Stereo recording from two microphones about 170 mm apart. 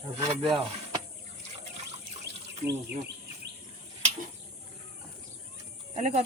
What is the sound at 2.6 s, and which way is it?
Speech, 90° right.